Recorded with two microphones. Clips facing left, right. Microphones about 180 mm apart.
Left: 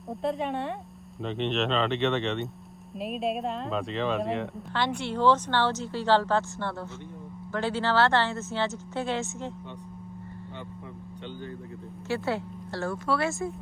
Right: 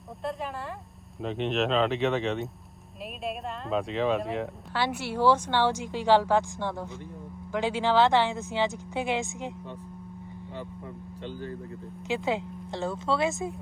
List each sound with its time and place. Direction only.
0.2 s speech: centre (ahead or behind)
12.0 s speech: 15° right (ahead or behind)